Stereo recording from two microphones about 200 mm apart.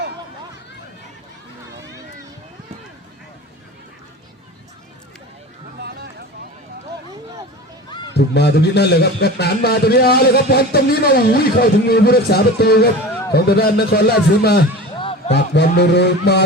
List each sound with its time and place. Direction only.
8.1 s a man's voice: 55° left (ahead or behind)